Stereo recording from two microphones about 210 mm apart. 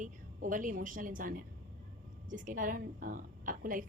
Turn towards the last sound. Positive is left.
turn(degrees=-40)  # may be behind; listen again after turning